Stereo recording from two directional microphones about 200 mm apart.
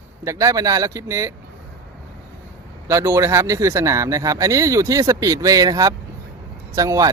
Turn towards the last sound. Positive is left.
turn(degrees=-15)  # may be behind; listen again after turning